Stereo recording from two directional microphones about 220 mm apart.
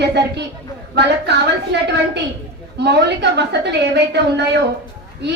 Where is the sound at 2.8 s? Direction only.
50° right (ahead or behind).